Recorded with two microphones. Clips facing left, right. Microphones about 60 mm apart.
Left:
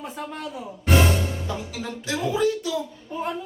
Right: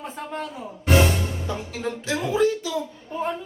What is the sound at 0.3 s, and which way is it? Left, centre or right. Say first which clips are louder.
Speech: right 1 dB; centre.